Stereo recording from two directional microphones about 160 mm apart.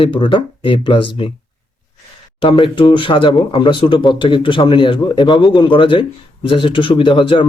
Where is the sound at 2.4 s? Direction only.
35° left (ahead or behind).